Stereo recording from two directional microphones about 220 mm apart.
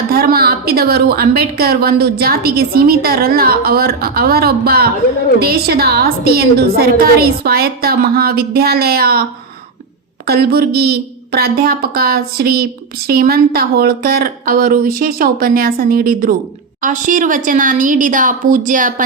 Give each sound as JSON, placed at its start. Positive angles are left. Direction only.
{"t": 0.1, "sound": "a woman's voice", "side_deg": -45}
{"t": 10.2, "sound": "a woman's voice", "side_deg": -45}